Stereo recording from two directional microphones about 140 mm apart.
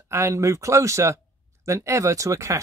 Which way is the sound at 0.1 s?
20° right (ahead or behind).